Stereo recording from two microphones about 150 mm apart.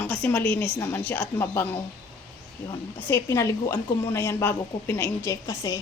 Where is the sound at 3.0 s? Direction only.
15° left (ahead or behind).